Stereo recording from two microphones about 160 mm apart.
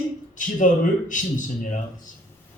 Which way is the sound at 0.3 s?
55° left (ahead or behind).